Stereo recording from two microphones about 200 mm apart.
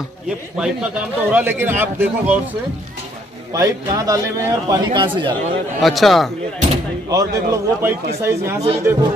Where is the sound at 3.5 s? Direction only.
15° right (ahead or behind).